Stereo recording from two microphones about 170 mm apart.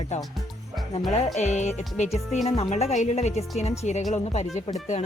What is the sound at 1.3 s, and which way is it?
A woman's voice, 40° left (ahead or behind).